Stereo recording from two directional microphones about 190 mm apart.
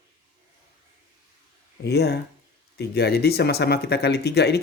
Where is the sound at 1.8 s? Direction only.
60° left (ahead or behind).